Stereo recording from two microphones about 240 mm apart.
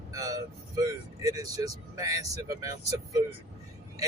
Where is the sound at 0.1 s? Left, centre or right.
Centre.